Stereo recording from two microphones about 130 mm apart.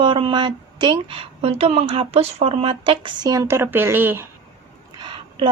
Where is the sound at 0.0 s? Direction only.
40° right (ahead or behind).